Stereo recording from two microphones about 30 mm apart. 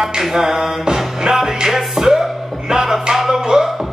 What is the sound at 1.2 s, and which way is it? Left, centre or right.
Music, centre.